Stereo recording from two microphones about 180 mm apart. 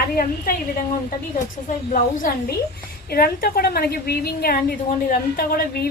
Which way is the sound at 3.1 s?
55° left (ahead or behind).